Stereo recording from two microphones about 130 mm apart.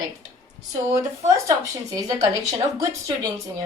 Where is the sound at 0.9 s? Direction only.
25° right (ahead or behind).